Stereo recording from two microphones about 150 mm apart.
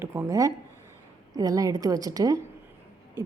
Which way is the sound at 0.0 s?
15° right (ahead or behind).